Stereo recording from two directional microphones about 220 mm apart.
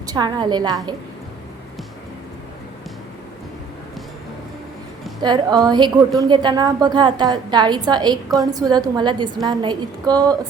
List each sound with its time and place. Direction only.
0.1 s a woman's voice: 20° right (ahead or behind)
5.2 s a woman's voice: 20° right (ahead or behind)